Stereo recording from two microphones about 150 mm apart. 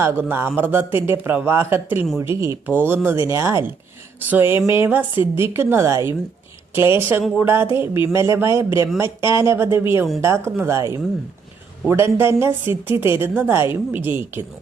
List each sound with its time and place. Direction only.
0.0 s a woman's voice: 15° right (ahead or behind)